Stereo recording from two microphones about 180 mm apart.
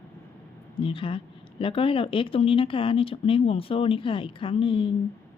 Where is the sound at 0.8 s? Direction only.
30° left (ahead or behind).